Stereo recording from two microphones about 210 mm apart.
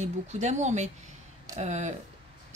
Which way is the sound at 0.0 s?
35° right (ahead or behind).